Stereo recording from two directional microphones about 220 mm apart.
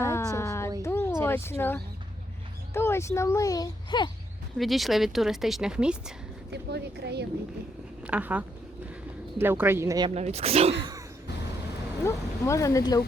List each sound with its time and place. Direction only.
0.0 s a sound: 15° left (ahead or behind)
1.2 s speech: 10° left (ahead or behind)
4.5 s speech: centre (ahead or behind)
6.5 s speech: 50° right (ahead or behind)
8.0 s speech: 5° right (ahead or behind)
10.2 s speech: 30° right (ahead or behind)
12.0 s speech: 15° left (ahead or behind)